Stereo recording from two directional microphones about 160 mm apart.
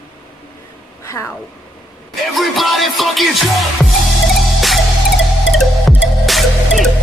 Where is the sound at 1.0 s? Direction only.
20° left (ahead or behind).